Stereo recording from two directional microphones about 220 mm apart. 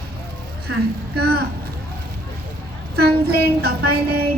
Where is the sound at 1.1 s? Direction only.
45° right (ahead or behind).